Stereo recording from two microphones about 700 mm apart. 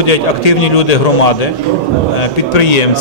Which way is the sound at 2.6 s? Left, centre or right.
Left.